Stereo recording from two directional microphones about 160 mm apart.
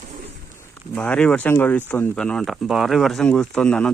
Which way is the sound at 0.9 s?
10° left (ahead or behind).